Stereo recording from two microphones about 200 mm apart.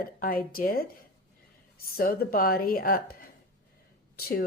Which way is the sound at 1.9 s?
50° left (ahead or behind).